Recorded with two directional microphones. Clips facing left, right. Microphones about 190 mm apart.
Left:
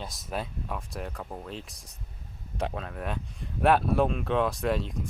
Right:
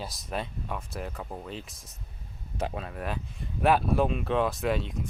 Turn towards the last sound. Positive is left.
turn(degrees=0)  # may be behind; listen again after turning